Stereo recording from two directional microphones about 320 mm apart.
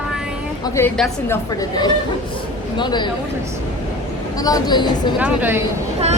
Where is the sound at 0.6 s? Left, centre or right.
Centre.